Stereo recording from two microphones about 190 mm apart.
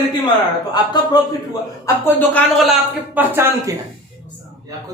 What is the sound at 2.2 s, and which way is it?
A man's voice, 5° left (ahead or behind).